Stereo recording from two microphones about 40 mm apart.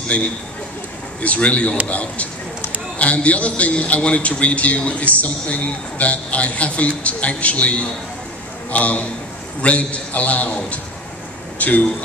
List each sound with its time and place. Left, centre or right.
1.2 s a man's voice: left